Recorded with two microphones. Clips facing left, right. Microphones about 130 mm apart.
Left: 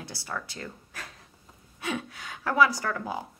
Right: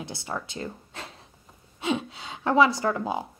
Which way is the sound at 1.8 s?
25° right (ahead or behind).